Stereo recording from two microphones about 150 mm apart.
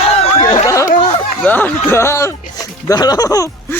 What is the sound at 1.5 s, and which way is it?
Speech, 10° left (ahead or behind).